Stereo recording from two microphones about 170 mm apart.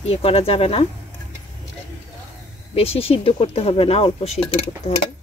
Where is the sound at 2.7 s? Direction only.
35° left (ahead or behind).